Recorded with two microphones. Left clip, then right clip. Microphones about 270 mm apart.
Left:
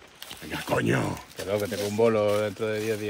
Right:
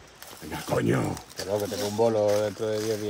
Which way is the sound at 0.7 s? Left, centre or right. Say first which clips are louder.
Even; centre.